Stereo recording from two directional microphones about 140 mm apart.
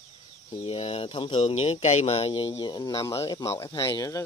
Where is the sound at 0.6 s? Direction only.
45° left (ahead or behind).